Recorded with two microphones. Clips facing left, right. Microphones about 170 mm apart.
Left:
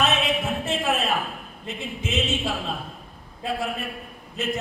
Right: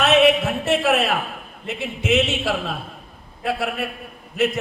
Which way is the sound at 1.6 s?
70° right (ahead or behind).